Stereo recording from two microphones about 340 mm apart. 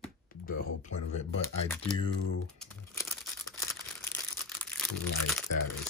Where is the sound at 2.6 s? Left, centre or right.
Centre.